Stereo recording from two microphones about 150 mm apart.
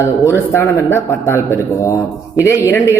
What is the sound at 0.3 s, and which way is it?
A man's voice, 15° left (ahead or behind).